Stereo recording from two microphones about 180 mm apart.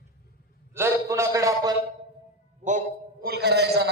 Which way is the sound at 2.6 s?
45° right (ahead or behind).